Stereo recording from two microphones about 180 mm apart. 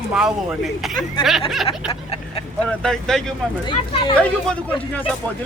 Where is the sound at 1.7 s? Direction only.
30° left (ahead or behind).